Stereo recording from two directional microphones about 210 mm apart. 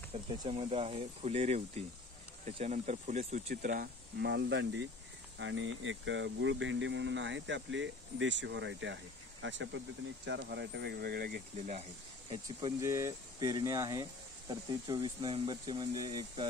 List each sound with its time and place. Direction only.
0.4 s speech: 25° right (ahead or behind); by 11.7 s 45° right (ahead or behind)
12.4 s speech: 15° right (ahead or behind)